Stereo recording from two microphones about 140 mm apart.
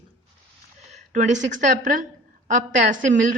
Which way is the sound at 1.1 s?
65° right (ahead or behind).